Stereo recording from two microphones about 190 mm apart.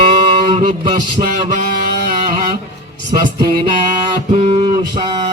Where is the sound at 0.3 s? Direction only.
25° right (ahead or behind).